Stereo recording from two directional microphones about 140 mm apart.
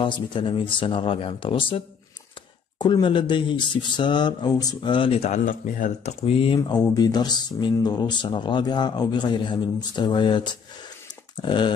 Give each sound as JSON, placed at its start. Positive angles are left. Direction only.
{"t": 0.0, "sound": "speech", "side_deg": 35}
{"t": 2.8, "sound": "speech", "side_deg": 35}
{"t": 5.4, "sound": "speech", "side_deg": 70}
{"t": 6.2, "sound": "speech", "side_deg": 40}